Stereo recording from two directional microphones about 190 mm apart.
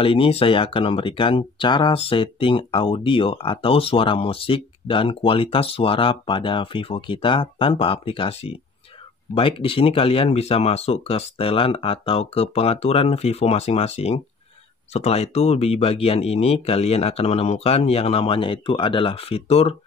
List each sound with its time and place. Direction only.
0.0 s speech: 30° left (ahead or behind)